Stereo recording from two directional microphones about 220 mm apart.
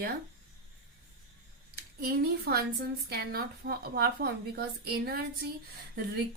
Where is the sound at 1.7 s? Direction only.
45° right (ahead or behind).